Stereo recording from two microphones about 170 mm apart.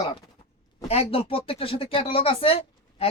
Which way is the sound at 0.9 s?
35° left (ahead or behind).